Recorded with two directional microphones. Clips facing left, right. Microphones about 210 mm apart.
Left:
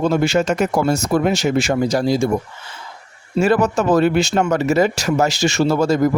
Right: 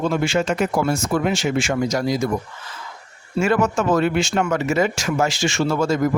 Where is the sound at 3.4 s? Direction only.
35° left (ahead or behind).